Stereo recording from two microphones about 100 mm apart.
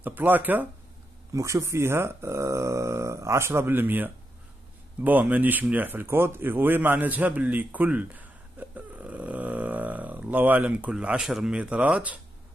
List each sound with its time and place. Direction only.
0.0 s speech: 20° right (ahead or behind)
1.3 s speech: 30° right (ahead or behind); by 12.2 s 15° right (ahead or behind)